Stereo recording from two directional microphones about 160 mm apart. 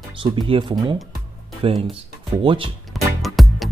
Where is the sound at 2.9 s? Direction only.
Centre (ahead or behind).